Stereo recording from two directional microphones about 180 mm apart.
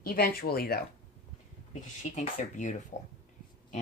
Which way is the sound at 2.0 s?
40° left (ahead or behind).